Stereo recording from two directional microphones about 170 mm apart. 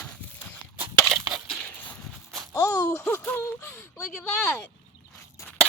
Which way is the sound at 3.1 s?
10° left (ahead or behind).